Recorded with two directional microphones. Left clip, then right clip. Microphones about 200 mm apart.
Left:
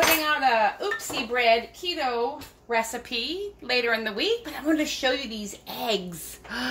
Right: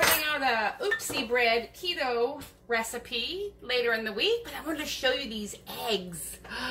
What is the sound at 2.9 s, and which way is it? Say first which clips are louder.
Speech: left 3 dB; 25° left (ahead or behind).